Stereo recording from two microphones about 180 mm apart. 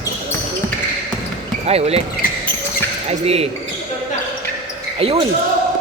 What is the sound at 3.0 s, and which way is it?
Speech, 35° right (ahead or behind).